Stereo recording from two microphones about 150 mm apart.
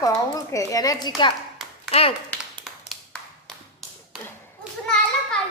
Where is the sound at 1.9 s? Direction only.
40° left (ahead or behind).